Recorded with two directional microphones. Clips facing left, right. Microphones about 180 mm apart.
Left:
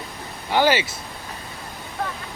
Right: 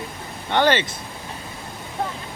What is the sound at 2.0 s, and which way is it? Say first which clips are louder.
Vehicle: right 1 dB; 25° right (ahead or behind).